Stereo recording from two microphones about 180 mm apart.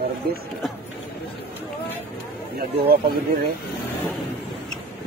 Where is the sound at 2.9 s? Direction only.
60° right (ahead or behind).